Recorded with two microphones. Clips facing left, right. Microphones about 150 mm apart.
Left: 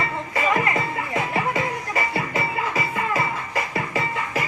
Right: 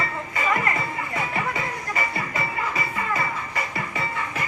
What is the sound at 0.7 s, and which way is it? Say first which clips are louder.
Music: left 3 dB; 25° left (ahead or behind).